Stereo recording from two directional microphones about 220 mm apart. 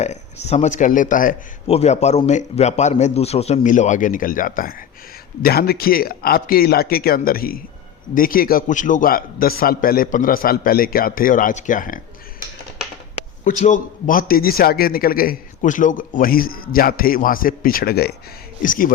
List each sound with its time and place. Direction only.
0.0 s a man's voice: 30° left (ahead or behind)
13.1 s a man's voice: 35° left (ahead or behind)